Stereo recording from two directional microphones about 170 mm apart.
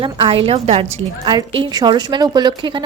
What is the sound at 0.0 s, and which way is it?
A woman's voice, 35° right (ahead or behind).